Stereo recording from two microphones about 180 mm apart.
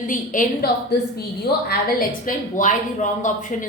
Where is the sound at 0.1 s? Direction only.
45° left (ahead or behind).